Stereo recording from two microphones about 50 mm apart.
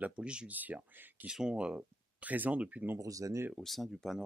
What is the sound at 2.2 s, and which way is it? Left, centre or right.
Speech, right.